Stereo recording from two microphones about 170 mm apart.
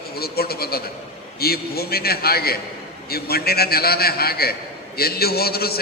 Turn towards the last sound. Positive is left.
turn(degrees=65)  # may be behind; listen again after turning